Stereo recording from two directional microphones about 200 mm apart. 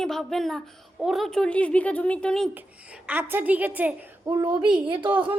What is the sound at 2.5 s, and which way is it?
A woman's voice, 5° right (ahead or behind).